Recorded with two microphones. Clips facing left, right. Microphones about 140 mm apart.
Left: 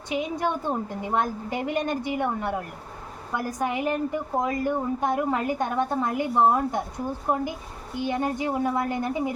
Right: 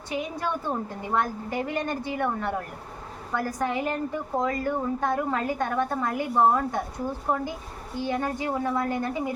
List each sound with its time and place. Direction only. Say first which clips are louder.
0.1 s a woman's voice: left 3 dB; 20° left (ahead or behind)